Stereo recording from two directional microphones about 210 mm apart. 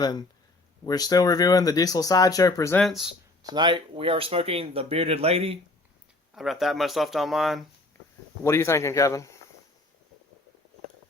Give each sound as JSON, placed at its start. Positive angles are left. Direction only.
{"t": 0.0, "sound": "speech", "side_deg": 20}
{"t": 2.7, "sound": "speech", "side_deg": 0}
{"t": 3.4, "sound": "speech", "side_deg": -20}
{"t": 6.3, "sound": "speech", "side_deg": 0}
{"t": 8.4, "sound": "speech", "side_deg": 10}